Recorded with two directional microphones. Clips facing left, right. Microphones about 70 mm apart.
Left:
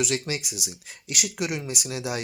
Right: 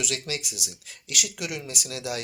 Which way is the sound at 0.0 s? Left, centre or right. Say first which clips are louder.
Left 4 dB; left.